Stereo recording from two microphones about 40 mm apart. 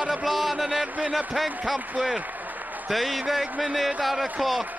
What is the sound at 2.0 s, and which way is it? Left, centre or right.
Speech, right.